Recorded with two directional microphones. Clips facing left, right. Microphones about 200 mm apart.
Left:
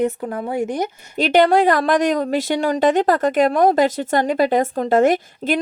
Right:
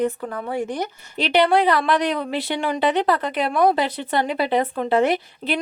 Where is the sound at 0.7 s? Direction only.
45° left (ahead or behind).